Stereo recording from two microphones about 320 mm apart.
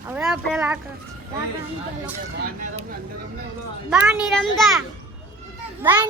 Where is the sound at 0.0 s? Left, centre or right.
Centre.